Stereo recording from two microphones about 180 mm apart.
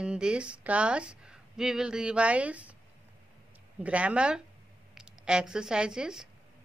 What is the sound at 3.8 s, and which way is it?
Speech, 5° right (ahead or behind).